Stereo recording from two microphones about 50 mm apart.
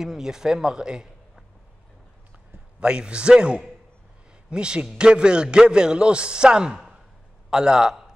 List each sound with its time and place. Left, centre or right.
0.0 s a man's voice: centre
2.8 s a man's voice: centre